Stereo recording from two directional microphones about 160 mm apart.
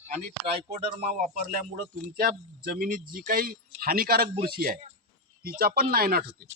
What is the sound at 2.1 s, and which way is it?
Speech, 65° right (ahead or behind).